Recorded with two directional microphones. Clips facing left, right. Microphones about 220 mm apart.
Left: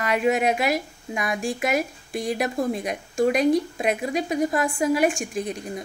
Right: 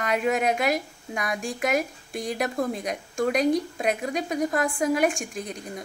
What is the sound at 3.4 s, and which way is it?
Speech, 40° right (ahead or behind).